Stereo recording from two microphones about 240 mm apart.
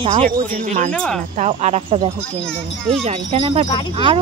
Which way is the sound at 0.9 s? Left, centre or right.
Centre.